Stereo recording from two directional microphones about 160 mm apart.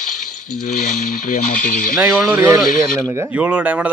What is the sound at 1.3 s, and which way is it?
Speech, 55° left (ahead or behind).